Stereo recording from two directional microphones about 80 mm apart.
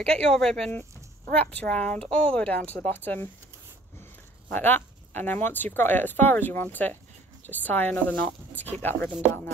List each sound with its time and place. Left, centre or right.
0.0 s speech: centre
1.3 s a woman's voice: centre